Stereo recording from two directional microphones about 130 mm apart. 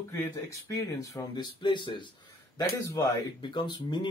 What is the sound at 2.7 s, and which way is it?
Speech, 25° left (ahead or behind).